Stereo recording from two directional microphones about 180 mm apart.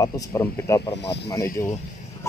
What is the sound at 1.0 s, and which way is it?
Speech, 70° left (ahead or behind).